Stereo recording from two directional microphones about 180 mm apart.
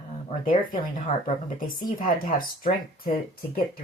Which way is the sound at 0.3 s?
45° left (ahead or behind).